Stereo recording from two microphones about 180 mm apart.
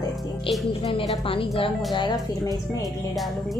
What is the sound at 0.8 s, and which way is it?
A woman's voice, 30° left (ahead or behind).